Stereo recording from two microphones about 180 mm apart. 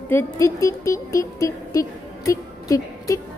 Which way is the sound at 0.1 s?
15° left (ahead or behind).